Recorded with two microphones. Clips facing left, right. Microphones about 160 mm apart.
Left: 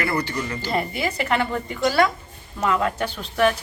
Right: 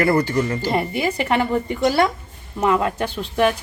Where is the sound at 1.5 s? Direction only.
25° right (ahead or behind).